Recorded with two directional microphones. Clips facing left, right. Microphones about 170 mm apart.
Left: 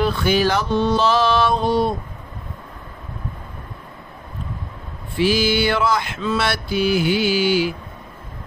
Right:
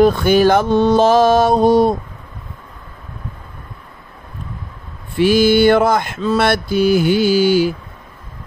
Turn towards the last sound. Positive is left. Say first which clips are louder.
# right 5 dB
turn(degrees=-40)  # may be behind; listen again after turning